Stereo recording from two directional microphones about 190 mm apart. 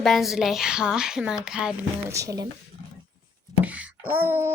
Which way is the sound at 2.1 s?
15° right (ahead or behind).